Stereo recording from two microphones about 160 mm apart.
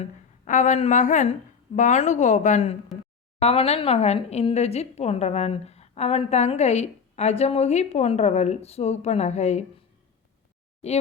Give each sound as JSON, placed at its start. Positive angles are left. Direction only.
{"t": 0.0, "sound": "a woman's voice", "side_deg": 50}